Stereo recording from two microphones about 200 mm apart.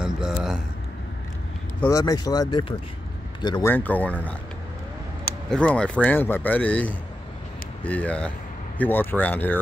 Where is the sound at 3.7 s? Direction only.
10° left (ahead or behind).